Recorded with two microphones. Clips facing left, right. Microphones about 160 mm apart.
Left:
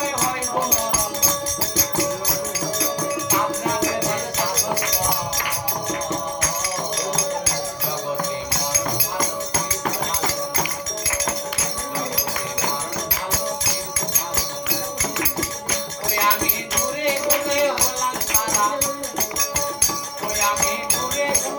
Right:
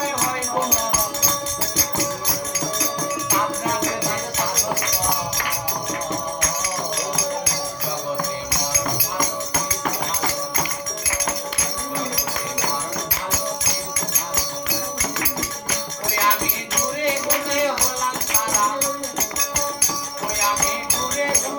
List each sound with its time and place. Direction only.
17.1 s music: 25° left (ahead or behind)